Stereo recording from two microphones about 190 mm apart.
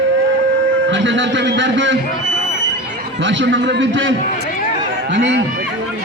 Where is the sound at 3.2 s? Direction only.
70° right (ahead or behind).